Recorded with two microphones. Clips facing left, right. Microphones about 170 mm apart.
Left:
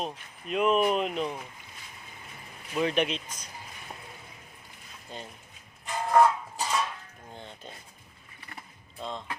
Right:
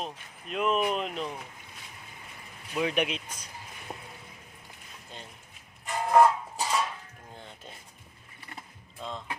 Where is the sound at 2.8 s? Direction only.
10° right (ahead or behind).